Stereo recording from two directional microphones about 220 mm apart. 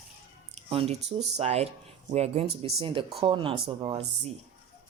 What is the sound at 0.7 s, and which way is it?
Speech, 25° right (ahead or behind).